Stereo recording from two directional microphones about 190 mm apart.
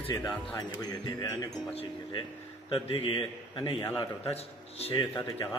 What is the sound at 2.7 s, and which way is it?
A man's voice, 30° left (ahead or behind).